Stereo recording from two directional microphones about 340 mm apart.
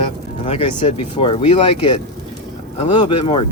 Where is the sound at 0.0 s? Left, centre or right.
Centre.